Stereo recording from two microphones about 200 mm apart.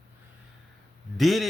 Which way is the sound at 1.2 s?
Centre (ahead or behind).